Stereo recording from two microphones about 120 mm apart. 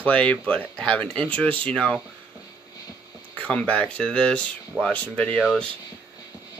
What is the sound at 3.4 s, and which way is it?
Speech, 10° left (ahead or behind).